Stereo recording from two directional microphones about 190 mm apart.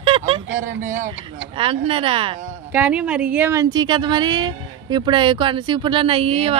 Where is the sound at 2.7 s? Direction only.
5° right (ahead or behind).